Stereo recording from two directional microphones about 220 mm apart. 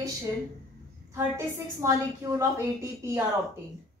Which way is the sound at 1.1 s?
15° right (ahead or behind).